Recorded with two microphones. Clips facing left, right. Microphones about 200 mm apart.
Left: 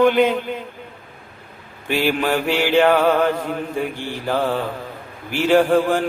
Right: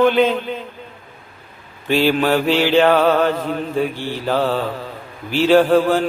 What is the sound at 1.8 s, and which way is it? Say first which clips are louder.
Music: right 4 dB; 15° left (ahead or behind).